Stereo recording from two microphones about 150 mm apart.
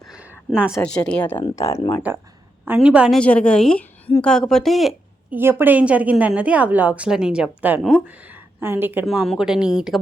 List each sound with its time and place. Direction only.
0.1 s a sound: 10° right (ahead or behind)
0.8 s a woman's voice: 5° left (ahead or behind)
1.4 s speech: 20° left (ahead or behind)
2.6 s a woman's voice: 10° right (ahead or behind)
3.2 s a woman's voice: 10° left (ahead or behind)
5.3 s a woman's voice: 15° right (ahead or behind)
9.0 s a woman's voice: centre (ahead or behind)